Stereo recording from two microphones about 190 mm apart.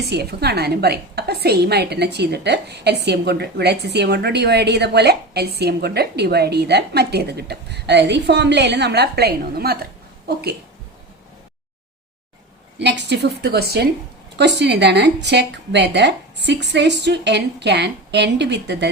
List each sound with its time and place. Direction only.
0.0 s a woman's voice: 60° right (ahead or behind)
12.8 s a woman's voice: 65° right (ahead or behind)